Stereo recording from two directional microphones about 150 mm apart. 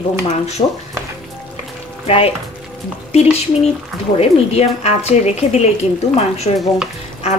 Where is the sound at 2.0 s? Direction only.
40° left (ahead or behind).